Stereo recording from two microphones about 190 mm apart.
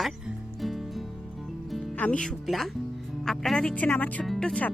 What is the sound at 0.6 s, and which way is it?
Music, centre (ahead or behind).